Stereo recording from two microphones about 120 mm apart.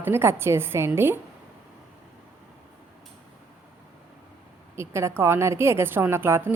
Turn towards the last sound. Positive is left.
turn(degrees=-20)  # may be behind; listen again after turning